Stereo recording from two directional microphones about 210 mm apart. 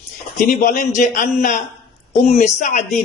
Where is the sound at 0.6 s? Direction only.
35° left (ahead or behind).